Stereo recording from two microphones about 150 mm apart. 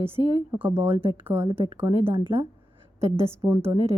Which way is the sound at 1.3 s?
40° right (ahead or behind).